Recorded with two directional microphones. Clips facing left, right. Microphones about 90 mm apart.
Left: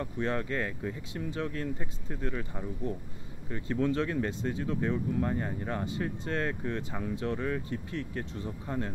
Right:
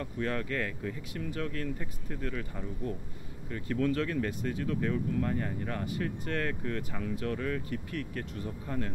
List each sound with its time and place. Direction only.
0.0 s speech: 25° left (ahead or behind)